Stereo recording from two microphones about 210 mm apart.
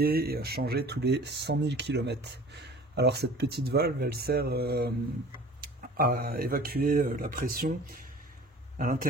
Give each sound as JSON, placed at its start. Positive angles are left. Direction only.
{"t": 0.0, "sound": "speech", "side_deg": -45}
{"t": 8.7, "sound": "speech", "side_deg": -40}